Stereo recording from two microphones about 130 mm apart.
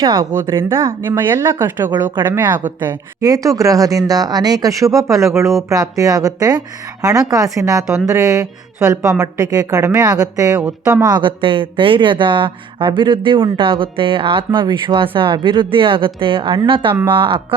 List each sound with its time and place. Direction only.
0.0 s a woman's voice: 30° right (ahead or behind)
2.8 s a woman's voice: 25° right (ahead or behind)